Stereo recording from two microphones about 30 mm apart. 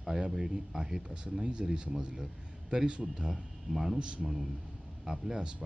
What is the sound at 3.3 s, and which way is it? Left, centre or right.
Speech, centre.